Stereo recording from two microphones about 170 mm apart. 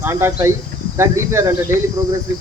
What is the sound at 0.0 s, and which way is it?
Speech, 15° right (ahead or behind).